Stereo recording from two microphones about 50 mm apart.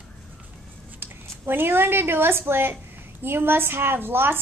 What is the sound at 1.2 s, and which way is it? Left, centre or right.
A woman's voice, right.